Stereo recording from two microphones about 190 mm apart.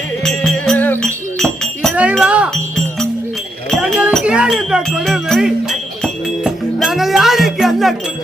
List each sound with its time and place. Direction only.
0.3 s music: centre (ahead or behind)